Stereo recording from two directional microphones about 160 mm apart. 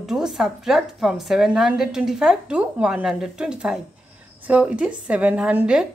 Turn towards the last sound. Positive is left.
turn(degrees=-10)  # may be behind; listen again after turning